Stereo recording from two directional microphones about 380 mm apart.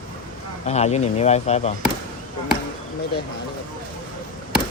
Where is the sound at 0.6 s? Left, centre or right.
Centre.